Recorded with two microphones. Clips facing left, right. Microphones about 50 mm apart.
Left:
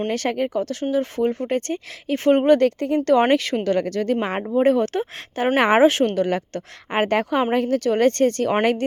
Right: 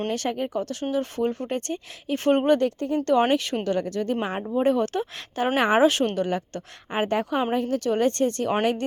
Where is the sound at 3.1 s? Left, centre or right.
Left.